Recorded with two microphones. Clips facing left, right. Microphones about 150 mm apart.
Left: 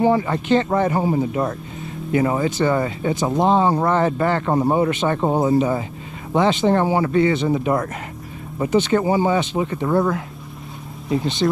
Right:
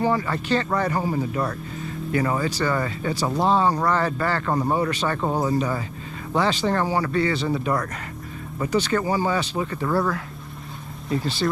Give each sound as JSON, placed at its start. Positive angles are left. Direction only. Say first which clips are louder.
{"t": 0.0, "sound": "speech", "louder": "left 5 dB", "side_deg": 20}
{"t": 4.5, "sound": "speech", "louder": "left 4 dB", "side_deg": 35}
{"t": 4.7, "sound": "speech", "louder": "left 5 dB", "side_deg": 20}
{"t": 11.4, "sound": "speech", "louder": "left 4 dB", "side_deg": 25}